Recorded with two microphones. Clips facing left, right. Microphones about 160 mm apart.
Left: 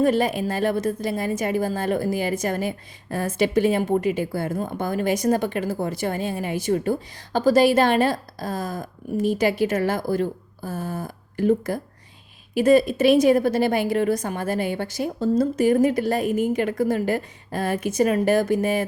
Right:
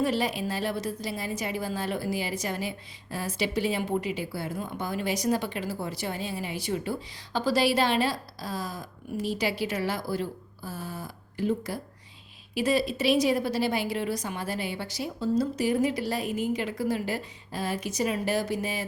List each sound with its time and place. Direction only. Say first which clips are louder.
0.0 s a woman's voice: left 7 dB; 50° left (ahead or behind)